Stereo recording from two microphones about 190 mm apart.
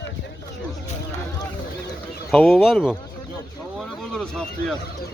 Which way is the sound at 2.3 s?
10° left (ahead or behind).